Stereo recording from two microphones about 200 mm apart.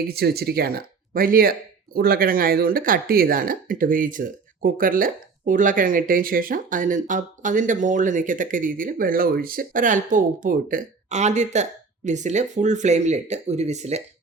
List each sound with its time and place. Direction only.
0.1 s speech: 50° right (ahead or behind); by 14.0 s 35° right (ahead or behind)